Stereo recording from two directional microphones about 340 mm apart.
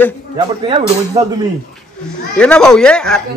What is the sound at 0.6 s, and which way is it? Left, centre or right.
Speech, centre.